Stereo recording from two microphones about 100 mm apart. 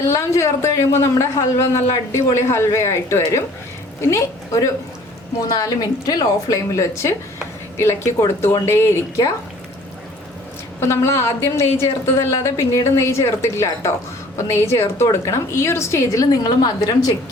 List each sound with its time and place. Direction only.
0.1 s a man's voice: 30° left (ahead or behind)
10.8 s a man's voice: 25° left (ahead or behind)